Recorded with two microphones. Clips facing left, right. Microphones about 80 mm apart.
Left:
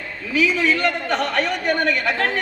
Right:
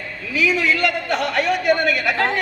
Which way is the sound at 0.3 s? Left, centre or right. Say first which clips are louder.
Even; left.